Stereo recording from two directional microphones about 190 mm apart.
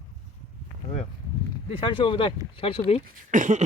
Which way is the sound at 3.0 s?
40° right (ahead or behind).